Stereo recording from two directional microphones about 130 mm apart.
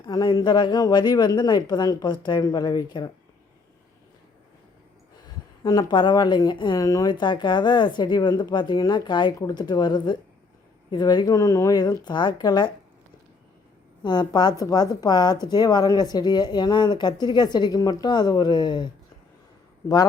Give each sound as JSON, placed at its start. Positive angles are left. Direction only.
{"t": 0.0, "sound": "a woman's voice", "side_deg": 35}
{"t": 5.6, "sound": "a woman's voice", "side_deg": 35}
{"t": 14.0, "sound": "a woman's voice", "side_deg": 35}